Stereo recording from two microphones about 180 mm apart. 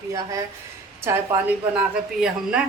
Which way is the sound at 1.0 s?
15° right (ahead or behind).